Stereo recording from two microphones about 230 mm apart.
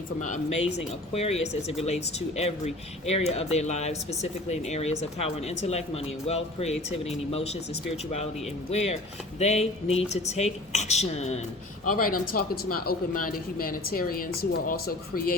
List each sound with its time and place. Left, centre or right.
0.2 s a woman's voice: left
8.7 s a woman's voice: left